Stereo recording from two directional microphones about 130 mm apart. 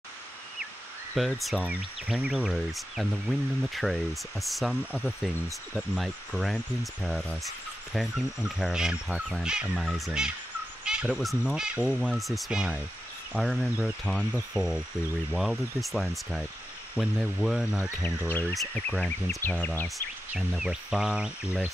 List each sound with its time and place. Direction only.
1.1 s speech: centre (ahead or behind)
1.6 s speech: 10° right (ahead or behind)
10.8 s owl: 10° right (ahead or behind)
11.1 s speech: centre (ahead or behind)
14.0 s speech: 10° left (ahead or behind)
14.5 s speech: 5° right (ahead or behind)
17.8 s speech: 15° left (ahead or behind)
20.3 s speech: 5° right (ahead or behind)